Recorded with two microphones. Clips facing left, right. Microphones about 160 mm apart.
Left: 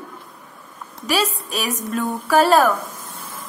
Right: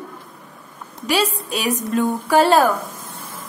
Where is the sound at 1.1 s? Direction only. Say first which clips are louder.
Right 2 dB; 25° right (ahead or behind).